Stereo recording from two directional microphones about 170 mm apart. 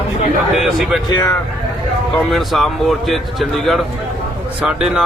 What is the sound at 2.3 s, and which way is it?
A man's voice, centre (ahead or behind).